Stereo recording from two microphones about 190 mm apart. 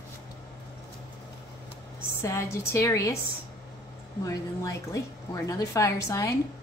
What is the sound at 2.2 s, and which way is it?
Speech, 15° left (ahead or behind).